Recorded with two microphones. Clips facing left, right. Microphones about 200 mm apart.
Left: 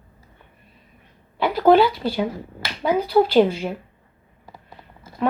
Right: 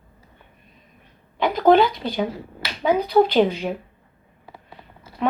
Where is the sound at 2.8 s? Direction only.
10° left (ahead or behind).